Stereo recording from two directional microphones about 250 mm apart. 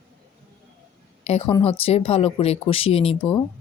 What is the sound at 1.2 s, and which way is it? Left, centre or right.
A woman's voice, left.